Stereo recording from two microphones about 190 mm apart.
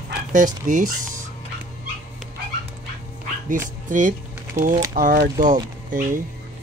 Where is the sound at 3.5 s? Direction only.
45° right (ahead or behind).